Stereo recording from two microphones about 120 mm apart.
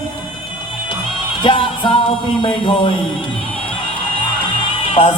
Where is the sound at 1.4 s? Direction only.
45° left (ahead or behind).